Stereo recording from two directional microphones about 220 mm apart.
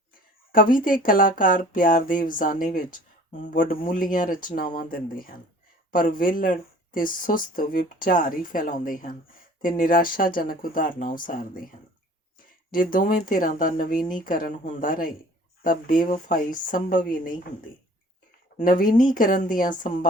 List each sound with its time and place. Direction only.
0.5 s speech: 40° left (ahead or behind)
12.7 s speech: 40° left (ahead or behind)
18.5 s speech: 35° left (ahead or behind)